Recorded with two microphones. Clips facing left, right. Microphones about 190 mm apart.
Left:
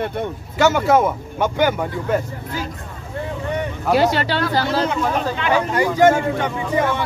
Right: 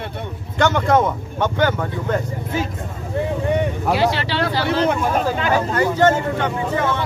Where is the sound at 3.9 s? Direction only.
45° left (ahead or behind).